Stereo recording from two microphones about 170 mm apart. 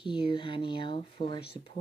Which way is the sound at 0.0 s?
30° left (ahead or behind).